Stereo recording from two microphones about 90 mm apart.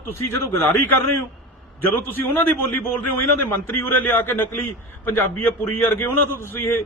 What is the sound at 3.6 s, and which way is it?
A man's voice, 20° left (ahead or behind).